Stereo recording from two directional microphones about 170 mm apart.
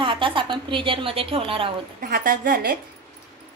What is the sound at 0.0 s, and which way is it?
A woman's voice, 30° right (ahead or behind).